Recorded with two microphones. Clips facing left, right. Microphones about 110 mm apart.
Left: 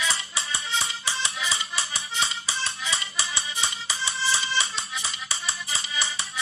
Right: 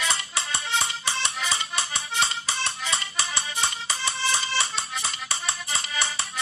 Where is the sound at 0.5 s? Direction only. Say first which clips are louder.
Right 2 dB; 60° right (ahead or behind).